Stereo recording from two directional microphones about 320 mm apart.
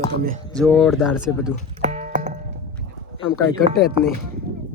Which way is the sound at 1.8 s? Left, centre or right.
Right.